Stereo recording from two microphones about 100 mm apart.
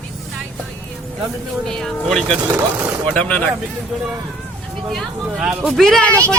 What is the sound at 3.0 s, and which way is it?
Speech, 10° left (ahead or behind).